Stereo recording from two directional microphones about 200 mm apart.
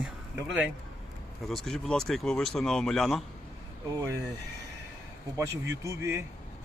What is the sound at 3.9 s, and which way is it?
Speech, 15° right (ahead or behind).